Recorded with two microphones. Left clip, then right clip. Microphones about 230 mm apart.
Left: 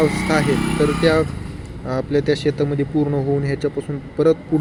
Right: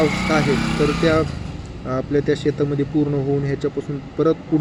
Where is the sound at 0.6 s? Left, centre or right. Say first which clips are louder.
Left 1 dB; right.